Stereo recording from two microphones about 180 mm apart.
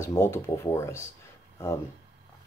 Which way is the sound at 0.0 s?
15° left (ahead or behind).